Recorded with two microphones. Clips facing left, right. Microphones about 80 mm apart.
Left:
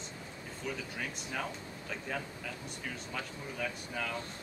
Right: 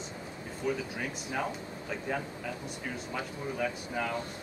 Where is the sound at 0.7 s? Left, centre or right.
Centre.